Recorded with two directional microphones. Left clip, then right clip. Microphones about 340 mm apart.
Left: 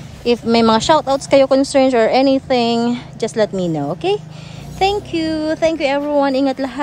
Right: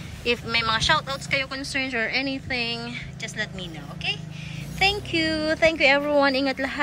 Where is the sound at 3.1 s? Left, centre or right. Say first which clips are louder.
Left 14 dB; centre.